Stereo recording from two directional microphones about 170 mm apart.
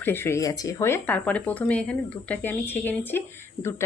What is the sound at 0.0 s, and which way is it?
Speech, 15° left (ahead or behind).